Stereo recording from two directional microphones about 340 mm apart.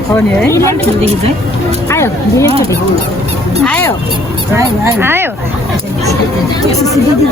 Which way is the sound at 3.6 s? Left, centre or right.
Centre.